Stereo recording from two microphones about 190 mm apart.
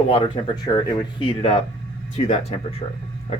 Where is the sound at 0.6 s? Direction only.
20° left (ahead or behind).